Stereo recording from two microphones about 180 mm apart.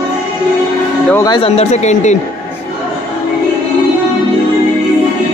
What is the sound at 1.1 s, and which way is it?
Speech, 20° left (ahead or behind).